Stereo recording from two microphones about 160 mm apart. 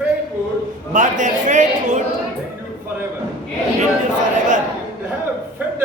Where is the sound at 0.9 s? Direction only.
50° right (ahead or behind).